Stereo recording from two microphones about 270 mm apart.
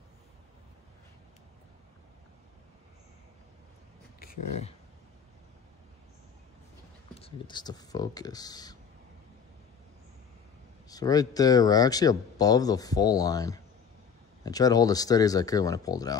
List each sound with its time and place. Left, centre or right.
4.2 s speech: left
7.2 s speech: centre
10.9 s speech: centre